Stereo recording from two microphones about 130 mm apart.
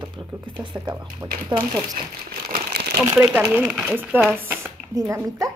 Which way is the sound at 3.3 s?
10° right (ahead or behind).